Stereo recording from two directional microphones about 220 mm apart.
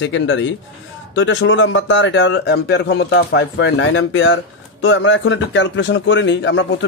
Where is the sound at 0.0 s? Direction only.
55° left (ahead or behind).